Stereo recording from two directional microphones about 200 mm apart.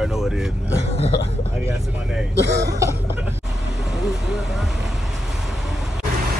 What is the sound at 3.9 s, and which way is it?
Speech, centre (ahead or behind).